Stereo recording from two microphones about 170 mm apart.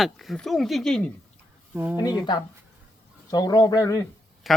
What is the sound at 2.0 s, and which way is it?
Speech, 25° left (ahead or behind).